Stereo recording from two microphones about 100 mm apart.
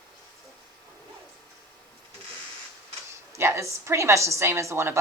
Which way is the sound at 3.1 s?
25° right (ahead or behind).